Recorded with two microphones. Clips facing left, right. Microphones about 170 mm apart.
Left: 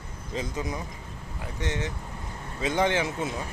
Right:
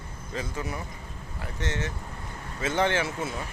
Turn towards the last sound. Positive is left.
turn(degrees=15)  # may be behind; listen again after turning